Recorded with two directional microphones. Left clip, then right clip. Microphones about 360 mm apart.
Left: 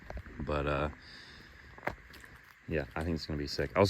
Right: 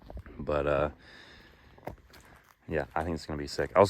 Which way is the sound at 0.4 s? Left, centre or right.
Right.